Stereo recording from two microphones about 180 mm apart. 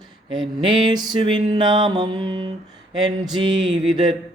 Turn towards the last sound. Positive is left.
turn(degrees=-25)  # may be behind; listen again after turning